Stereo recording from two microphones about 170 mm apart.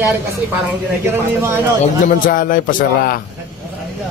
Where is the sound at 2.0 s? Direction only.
55° left (ahead or behind).